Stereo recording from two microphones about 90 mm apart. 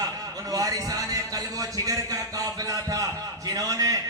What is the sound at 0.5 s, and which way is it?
A man's voice, 40° right (ahead or behind).